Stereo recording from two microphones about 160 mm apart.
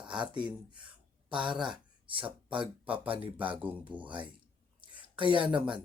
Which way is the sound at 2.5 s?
30° right (ahead or behind).